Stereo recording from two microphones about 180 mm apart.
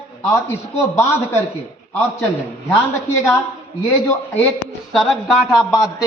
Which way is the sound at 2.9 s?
15° left (ahead or behind).